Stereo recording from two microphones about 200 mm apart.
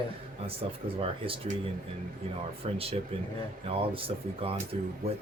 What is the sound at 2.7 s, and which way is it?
Speech, 30° right (ahead or behind).